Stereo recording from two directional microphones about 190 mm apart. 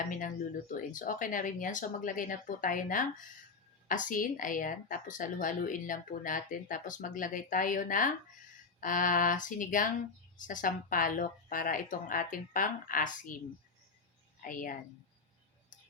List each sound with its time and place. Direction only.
0.2 s a woman's voice: 45° left (ahead or behind)
14.4 s a woman's voice: 45° left (ahead or behind)